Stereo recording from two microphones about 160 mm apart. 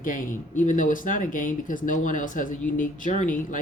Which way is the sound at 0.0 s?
55° left (ahead or behind).